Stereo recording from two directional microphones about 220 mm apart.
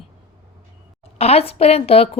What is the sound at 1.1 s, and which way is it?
A woman's voice, 25° left (ahead or behind).